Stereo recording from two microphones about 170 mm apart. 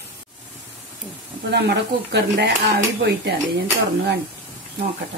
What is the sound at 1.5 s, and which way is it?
Speech, 80° right.